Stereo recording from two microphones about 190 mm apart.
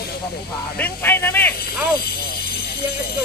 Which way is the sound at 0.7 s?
10° left (ahead or behind).